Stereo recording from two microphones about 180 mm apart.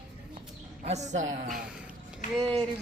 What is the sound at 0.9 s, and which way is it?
Speech, 40° right (ahead or behind).